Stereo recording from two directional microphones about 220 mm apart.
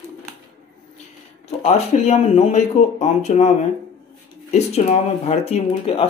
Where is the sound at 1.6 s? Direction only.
30° left (ahead or behind).